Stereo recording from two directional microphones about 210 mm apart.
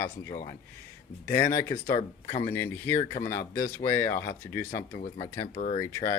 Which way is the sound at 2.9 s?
35° left (ahead or behind).